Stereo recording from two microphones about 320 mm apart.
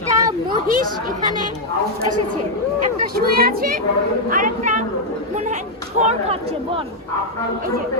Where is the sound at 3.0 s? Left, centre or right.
Right.